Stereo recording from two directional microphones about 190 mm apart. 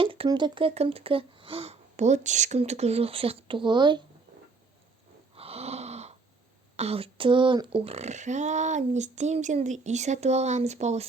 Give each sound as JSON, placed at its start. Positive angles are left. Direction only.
{"t": 0.0, "sound": "speech", "side_deg": -30}
{"t": 5.3, "sound": "wheeze", "side_deg": -30}
{"t": 6.7, "sound": "speech", "side_deg": -30}